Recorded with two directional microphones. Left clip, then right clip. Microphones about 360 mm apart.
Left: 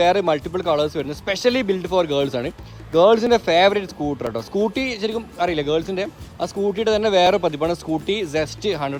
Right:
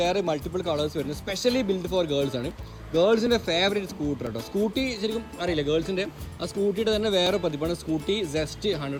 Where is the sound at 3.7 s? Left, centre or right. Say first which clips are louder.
Left 6 dB; centre.